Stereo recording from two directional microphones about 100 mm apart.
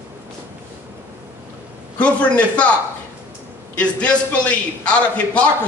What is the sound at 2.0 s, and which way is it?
Speech, 15° left (ahead or behind).